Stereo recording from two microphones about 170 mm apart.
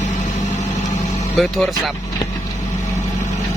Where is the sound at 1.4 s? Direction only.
Centre (ahead or behind).